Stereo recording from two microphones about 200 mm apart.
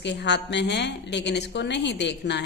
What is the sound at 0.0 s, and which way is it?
A man's voice, 60° left (ahead or behind).